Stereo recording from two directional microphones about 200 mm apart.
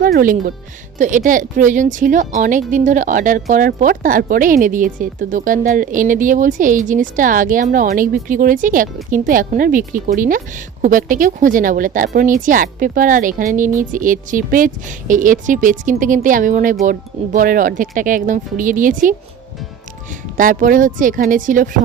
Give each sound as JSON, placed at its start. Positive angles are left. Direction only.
{"t": 0.0, "sound": "a woman's voice", "side_deg": -45}
{"t": 20.3, "sound": "a woman's voice", "side_deg": -40}